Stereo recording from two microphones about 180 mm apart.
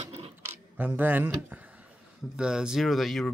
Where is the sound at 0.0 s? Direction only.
35° right (ahead or behind).